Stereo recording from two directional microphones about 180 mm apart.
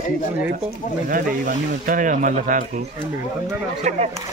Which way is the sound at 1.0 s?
50° right (ahead or behind).